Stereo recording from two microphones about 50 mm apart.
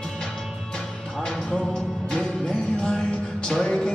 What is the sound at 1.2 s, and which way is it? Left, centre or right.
Music, centre.